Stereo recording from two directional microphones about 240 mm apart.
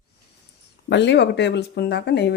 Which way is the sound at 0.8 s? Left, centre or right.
Left.